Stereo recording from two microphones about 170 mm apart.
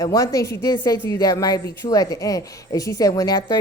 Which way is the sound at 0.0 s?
20° left (ahead or behind).